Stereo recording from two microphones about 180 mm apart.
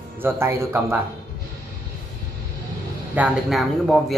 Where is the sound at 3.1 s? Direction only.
5° right (ahead or behind).